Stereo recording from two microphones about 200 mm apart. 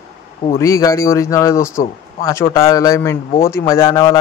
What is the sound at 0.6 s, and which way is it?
Speech, 15° left (ahead or behind).